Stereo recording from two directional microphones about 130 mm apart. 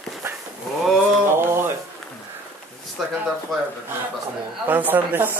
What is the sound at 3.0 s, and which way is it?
Speech, centre (ahead or behind).